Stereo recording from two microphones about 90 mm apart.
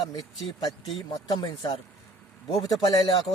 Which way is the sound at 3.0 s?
80° left.